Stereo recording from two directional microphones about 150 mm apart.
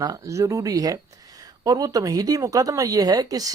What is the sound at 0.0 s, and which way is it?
Speech, 20° right (ahead or behind).